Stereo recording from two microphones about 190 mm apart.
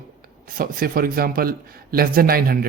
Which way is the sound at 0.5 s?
50° right (ahead or behind).